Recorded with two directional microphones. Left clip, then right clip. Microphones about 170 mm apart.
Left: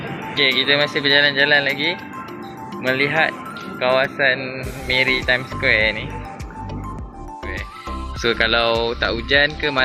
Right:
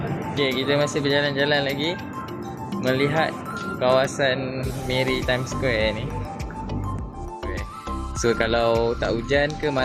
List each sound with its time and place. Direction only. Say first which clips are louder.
0.3 s speech: left 6 dB; 5° right (ahead or behind)
8.2 s speech: left 3 dB; 15° right (ahead or behind)